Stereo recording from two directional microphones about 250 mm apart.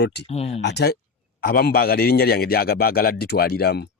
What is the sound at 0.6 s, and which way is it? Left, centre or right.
A man's voice, left.